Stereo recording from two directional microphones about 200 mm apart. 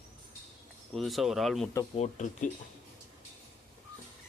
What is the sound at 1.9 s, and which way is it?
Speech, 35° left (ahead or behind).